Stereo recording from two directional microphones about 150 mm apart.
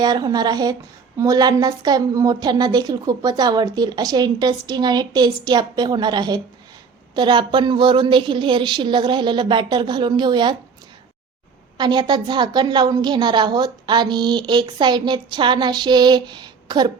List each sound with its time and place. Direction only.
0.0 s a woman's voice: 25° right (ahead or behind)
11.8 s a woman's voice: 30° right (ahead or behind)